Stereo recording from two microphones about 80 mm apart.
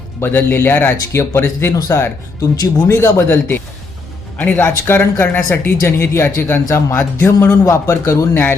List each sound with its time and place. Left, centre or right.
0.2 s speech: left
3.2 s speech: left